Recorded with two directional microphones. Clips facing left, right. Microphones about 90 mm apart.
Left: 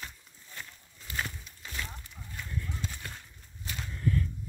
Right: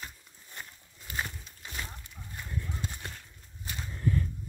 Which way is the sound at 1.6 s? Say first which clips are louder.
Left 1 dB; 20° right (ahead or behind).